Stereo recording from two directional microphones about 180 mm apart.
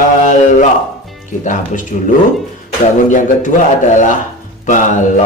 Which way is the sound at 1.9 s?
35° left (ahead or behind).